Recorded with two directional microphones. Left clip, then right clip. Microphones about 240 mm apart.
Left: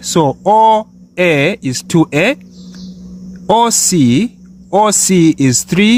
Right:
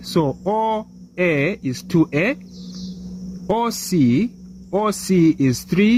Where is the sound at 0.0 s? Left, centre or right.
Left.